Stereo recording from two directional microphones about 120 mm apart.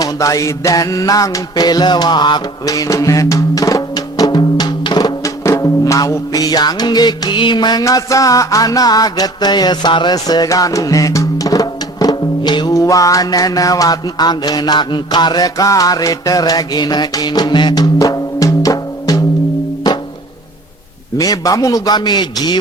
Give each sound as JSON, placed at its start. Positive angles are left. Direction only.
{"t": 0.0, "sound": "music", "side_deg": 25}
{"t": 21.2, "sound": "a man's voice", "side_deg": 30}